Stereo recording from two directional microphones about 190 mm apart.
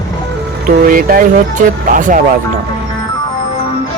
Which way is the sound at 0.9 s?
50° right (ahead or behind).